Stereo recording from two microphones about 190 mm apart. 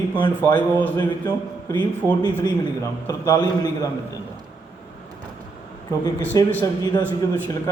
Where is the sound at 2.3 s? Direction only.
15° left (ahead or behind).